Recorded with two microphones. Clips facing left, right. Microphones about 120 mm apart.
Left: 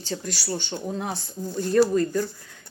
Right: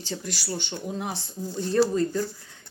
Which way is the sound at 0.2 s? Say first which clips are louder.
Left 2 dB; 45° left (ahead or behind).